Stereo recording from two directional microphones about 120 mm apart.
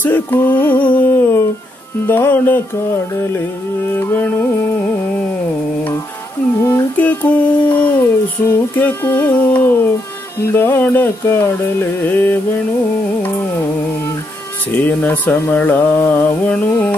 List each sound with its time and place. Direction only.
0.0 s music: 15° left (ahead or behind)
6.6 s music: 20° left (ahead or behind)
14.7 s music: 15° left (ahead or behind)